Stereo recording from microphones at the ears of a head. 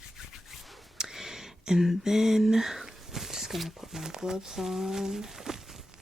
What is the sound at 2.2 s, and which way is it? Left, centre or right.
Speech, centre.